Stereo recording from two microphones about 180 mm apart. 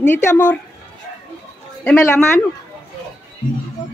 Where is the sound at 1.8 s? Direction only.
10° left (ahead or behind).